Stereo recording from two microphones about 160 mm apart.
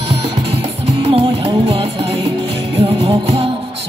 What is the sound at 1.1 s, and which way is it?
Music, 35° right (ahead or behind).